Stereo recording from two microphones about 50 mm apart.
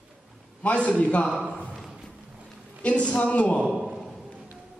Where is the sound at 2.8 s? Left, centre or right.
Left.